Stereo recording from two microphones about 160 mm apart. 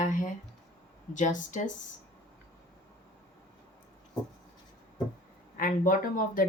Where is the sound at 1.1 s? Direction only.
50° left (ahead or behind).